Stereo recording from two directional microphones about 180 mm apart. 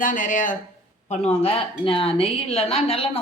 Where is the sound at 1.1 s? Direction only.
35° left (ahead or behind).